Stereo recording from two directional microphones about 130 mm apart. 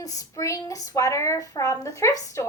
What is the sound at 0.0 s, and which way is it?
A woman's voice, 25° left (ahead or behind).